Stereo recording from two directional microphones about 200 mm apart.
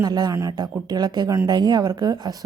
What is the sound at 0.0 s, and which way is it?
Speech, 20° right (ahead or behind).